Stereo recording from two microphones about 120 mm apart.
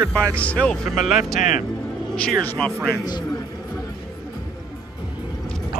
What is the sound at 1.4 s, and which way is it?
Speech, 90° left.